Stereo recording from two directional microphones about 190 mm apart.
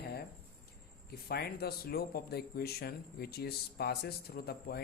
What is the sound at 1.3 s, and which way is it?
Speech, 55° left (ahead or behind).